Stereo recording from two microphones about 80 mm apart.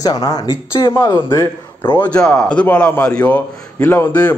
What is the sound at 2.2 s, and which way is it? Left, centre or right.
A man's voice, centre.